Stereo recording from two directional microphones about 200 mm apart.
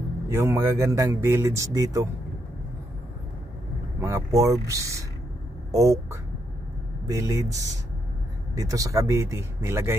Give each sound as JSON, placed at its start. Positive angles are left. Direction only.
{"t": 0.3, "sound": "speech", "side_deg": -10}
{"t": 4.0, "sound": "speech", "side_deg": -15}
{"t": 8.5, "sound": "speech", "side_deg": -15}